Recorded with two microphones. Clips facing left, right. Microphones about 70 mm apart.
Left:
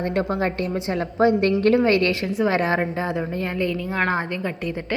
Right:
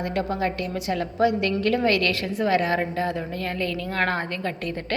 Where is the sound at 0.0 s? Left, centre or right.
Left.